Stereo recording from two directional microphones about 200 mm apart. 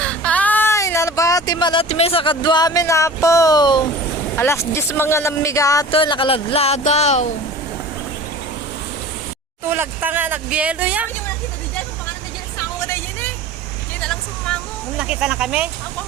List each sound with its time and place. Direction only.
0.0 s speech: 5° left (ahead or behind)
5.9 s speech: 25° left (ahead or behind)
9.6 s speech: 10° right (ahead or behind)
12.9 s vehicle: 10° left (ahead or behind)